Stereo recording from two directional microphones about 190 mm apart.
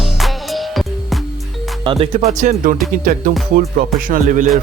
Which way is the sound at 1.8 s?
30° right (ahead or behind).